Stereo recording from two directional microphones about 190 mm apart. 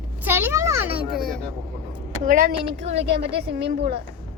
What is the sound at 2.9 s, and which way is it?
Speech, 65° right (ahead or behind).